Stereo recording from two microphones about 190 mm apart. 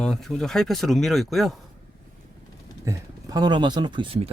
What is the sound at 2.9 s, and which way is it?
Speech, 20° right (ahead or behind).